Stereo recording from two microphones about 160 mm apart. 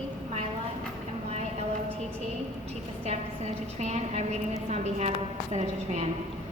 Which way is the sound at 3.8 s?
45° right (ahead or behind).